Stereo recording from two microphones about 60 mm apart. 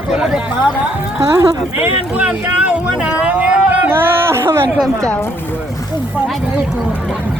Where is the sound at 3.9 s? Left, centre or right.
Right.